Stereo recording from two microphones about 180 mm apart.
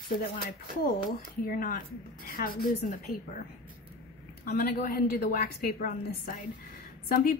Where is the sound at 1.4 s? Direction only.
55° left (ahead or behind).